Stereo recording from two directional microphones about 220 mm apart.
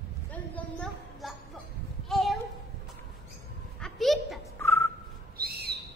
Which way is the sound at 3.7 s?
Centre (ahead or behind).